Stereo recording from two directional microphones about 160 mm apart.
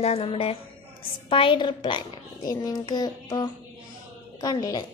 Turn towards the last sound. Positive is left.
turn(degrees=25)  # may be behind; listen again after turning